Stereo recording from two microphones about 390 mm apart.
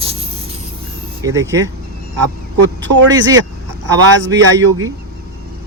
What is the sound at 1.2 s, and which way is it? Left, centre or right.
Speech, centre.